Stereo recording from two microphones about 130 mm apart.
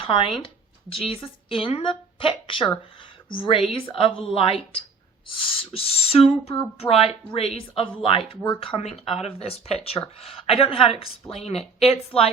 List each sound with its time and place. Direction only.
0.0 s speech: 45° left (ahead or behind)